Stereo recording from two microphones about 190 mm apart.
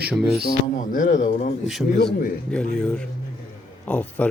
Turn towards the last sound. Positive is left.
turn(degrees=5)  # may be behind; listen again after turning